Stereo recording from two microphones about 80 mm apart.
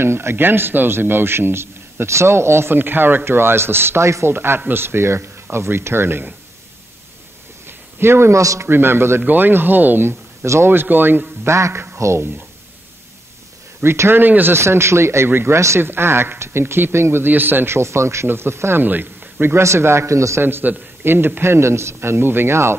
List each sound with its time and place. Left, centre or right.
0.0 s speech: right
7.6 s a man's voice: right
8.6 s speech: right
10.4 s speech: right
10.7 s speech: right
11.4 s speech: right
13.8 s speech: right
20.4 s speech: right